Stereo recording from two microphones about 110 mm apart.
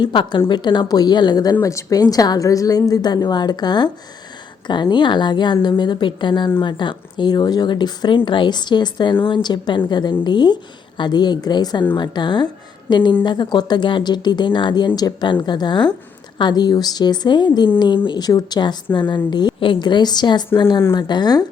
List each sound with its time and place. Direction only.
0.0 s a woman's voice: 45° left (ahead or behind)